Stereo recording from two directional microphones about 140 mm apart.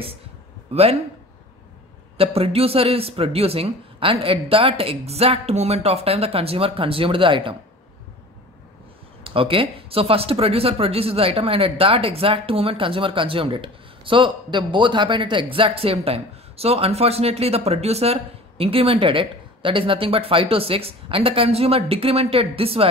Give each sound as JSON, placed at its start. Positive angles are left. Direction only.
{"t": 2.1, "sound": "speech", "side_deg": -45}
{"t": 9.2, "sound": "speech", "side_deg": -40}